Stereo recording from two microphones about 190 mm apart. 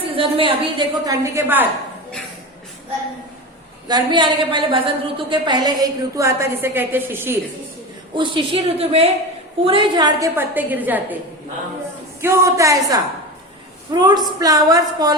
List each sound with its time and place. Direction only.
0.0 s a woman's voice: 30° right (ahead or behind); by 1.6 s 15° right (ahead or behind)
3.8 s a woman's voice: 25° right (ahead or behind)
8.1 s a woman's voice: 25° right (ahead or behind); by 11.2 s 10° right (ahead or behind)
12.2 s a woman's voice: 15° right (ahead or behind)